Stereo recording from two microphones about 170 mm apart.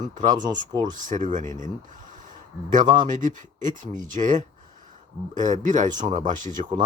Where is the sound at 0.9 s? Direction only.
50° right (ahead or behind).